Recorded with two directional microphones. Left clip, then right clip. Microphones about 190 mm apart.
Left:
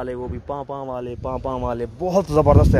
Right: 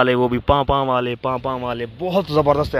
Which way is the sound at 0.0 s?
40° right (ahead or behind).